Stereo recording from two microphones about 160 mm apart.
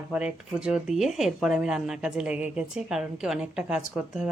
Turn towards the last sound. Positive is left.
turn(degrees=-5)  # may be behind; listen again after turning